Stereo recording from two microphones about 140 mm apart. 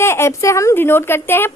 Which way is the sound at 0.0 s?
20° left (ahead or behind).